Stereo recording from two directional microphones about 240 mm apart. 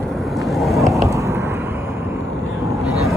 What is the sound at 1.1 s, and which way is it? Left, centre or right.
Vehicle, centre.